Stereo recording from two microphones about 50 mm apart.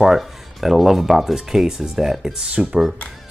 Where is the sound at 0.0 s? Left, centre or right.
Centre.